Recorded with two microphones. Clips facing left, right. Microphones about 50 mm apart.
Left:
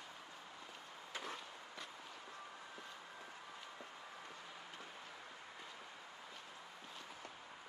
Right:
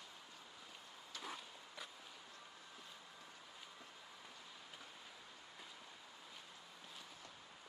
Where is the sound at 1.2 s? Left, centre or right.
Centre.